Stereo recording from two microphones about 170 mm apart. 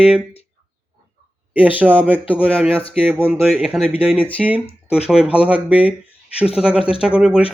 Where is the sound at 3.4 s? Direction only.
5° right (ahead or behind).